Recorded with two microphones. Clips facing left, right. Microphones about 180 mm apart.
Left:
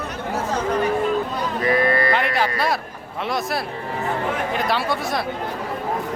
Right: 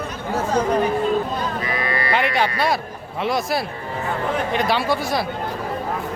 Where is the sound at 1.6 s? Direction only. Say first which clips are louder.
Left 6 dB; 50° left (ahead or behind).